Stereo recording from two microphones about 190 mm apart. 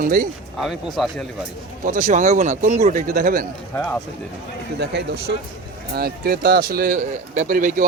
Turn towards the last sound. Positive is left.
turn(degrees=-45)  # may be behind; listen again after turning